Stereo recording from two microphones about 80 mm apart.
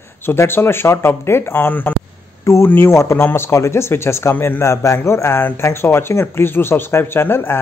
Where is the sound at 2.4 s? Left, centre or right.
Left.